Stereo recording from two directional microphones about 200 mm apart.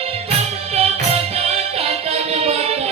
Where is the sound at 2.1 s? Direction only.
30° right (ahead or behind).